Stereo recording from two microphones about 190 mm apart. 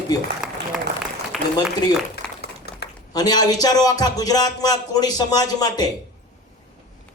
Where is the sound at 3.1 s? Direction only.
20° left (ahead or behind).